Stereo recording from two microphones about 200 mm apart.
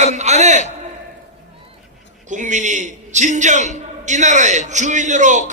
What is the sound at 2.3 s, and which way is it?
A man's voice, 40° right (ahead or behind).